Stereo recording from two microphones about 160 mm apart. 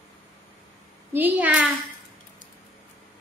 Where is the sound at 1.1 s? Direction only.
10° right (ahead or behind).